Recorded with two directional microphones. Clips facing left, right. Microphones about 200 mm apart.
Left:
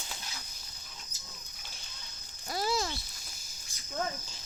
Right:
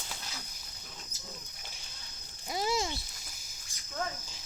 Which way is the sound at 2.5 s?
20° right (ahead or behind).